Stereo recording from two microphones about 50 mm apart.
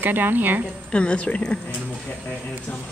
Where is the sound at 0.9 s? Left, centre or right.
Left.